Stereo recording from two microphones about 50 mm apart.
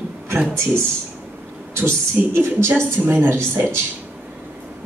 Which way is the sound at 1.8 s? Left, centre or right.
Right.